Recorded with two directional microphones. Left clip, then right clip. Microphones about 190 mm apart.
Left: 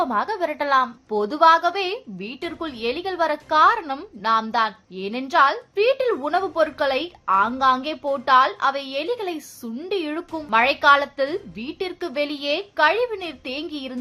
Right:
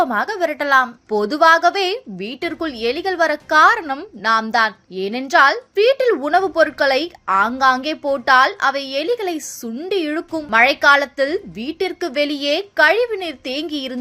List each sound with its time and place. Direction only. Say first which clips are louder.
0.0 s a woman's voice: right 4 dB; 15° right (ahead or behind)